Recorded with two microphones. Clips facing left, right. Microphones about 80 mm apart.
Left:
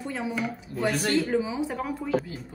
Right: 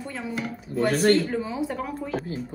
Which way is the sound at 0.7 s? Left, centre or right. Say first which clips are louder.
Right 6 dB; right.